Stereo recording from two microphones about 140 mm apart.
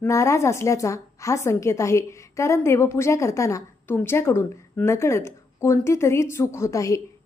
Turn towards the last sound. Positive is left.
turn(degrees=25)  # may be behind; listen again after turning